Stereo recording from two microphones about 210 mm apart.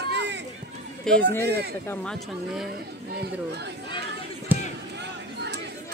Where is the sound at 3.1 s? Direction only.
50° right (ahead or behind).